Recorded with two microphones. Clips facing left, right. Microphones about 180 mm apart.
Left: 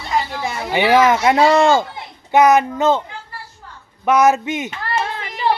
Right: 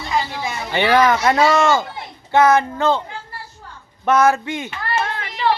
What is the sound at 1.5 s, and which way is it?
Speech, 35° left (ahead or behind).